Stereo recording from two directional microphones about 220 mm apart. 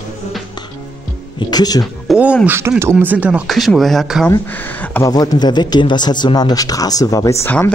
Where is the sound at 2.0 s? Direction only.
5° right (ahead or behind).